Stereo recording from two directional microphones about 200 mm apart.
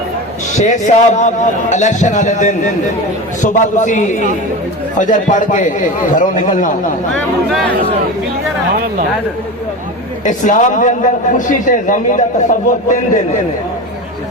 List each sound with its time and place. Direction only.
0.5 s a man's voice: 35° left (ahead or behind)
10.2 s a man's voice: 40° left (ahead or behind)